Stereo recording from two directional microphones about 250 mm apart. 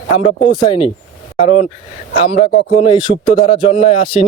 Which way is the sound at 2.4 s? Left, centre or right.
Left.